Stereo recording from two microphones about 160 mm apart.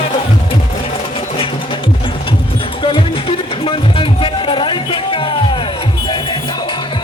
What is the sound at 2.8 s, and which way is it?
Music, 35° left (ahead or behind).